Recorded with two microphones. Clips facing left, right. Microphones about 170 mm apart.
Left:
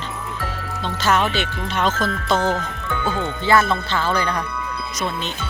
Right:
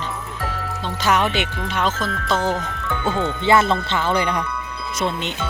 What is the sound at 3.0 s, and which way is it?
Speech, 25° right (ahead or behind).